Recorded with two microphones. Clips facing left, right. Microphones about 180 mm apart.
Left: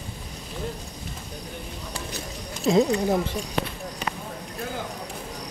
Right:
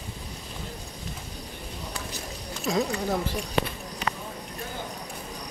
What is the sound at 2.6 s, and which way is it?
Speech, 25° left (ahead or behind).